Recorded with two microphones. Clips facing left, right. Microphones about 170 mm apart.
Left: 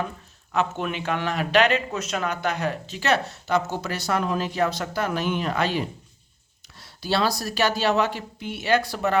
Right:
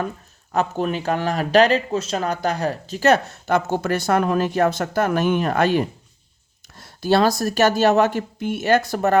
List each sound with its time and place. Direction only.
0.5 s speech: 40° right (ahead or behind)